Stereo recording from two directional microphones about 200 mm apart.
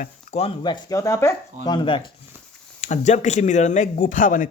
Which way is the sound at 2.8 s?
35° left (ahead or behind).